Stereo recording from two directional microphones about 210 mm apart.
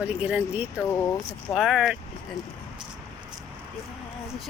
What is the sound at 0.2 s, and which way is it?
Speech, 5° right (ahead or behind).